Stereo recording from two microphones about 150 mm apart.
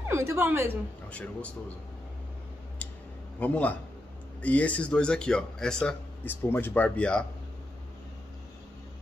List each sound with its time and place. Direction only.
0.1 s a woman's voice: 20° right (ahead or behind)
1.1 s speech: 10° left (ahead or behind)
3.3 s speech: 10° left (ahead or behind)